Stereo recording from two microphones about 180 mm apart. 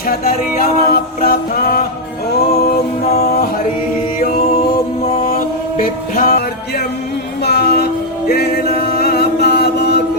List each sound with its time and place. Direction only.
0.1 s music: 50° left (ahead or behind)
5.0 s music: 35° left (ahead or behind)
5.8 s music: 50° left (ahead or behind)
7.4 s music: 65° left (ahead or behind)
8.3 s chant: 60° left (ahead or behind)